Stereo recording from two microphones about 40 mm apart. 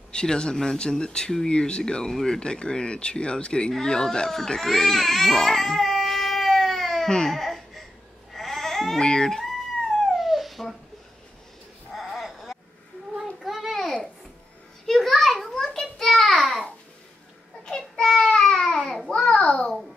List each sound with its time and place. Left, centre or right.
0.1 s speech: left
4.6 s speech: centre
6.0 s baby cry: centre
8.3 s babbling: centre
9.0 s speech: centre
10.1 s dog: centre
12.1 s sheep: centre
13.4 s a sound: centre
14.9 s a sound: centre
17.6 s child singing: centre
18.4 s babbling: centre